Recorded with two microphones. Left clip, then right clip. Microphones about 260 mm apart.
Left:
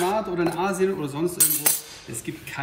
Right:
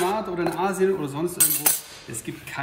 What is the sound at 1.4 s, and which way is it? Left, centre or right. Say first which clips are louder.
Speech: even; right.